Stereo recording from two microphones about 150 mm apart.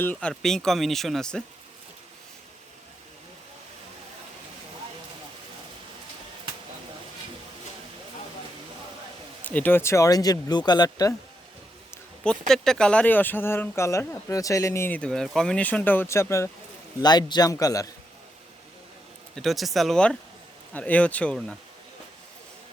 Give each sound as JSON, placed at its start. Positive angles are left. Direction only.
{"t": 0.0, "sound": "speech", "side_deg": 10}
{"t": 9.4, "sound": "speech", "side_deg": 10}
{"t": 12.2, "sound": "speech", "side_deg": 5}
{"t": 19.4, "sound": "speech", "side_deg": 0}